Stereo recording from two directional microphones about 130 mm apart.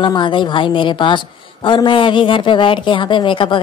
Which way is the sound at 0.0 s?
35° left (ahead or behind).